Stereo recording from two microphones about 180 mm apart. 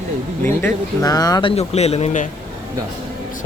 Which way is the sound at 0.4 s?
15° left (ahead or behind).